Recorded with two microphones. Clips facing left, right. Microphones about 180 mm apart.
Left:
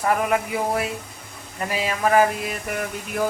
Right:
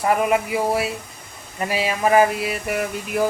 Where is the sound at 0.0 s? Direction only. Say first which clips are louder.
Right 2 dB; 5° right (ahead or behind).